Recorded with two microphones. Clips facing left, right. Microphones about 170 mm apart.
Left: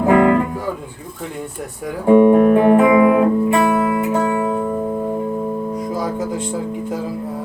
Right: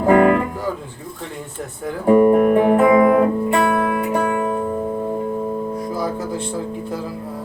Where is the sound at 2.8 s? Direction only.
15° left (ahead or behind).